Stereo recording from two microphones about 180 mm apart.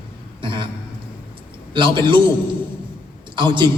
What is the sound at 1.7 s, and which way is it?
Speech, 25° right (ahead or behind).